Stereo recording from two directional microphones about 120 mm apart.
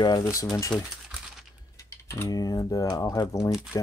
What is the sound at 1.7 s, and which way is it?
Mechanisms, 25° left (ahead or behind).